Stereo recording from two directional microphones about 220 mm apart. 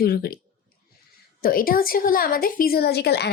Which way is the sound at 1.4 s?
40° left (ahead or behind).